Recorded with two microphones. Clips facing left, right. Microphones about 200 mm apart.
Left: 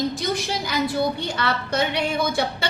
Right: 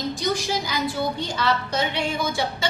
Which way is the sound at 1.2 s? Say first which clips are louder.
Right 1 dB; 60° left (ahead or behind).